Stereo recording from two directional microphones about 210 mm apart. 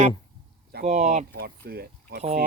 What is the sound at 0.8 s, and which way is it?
Speech, 30° right (ahead or behind).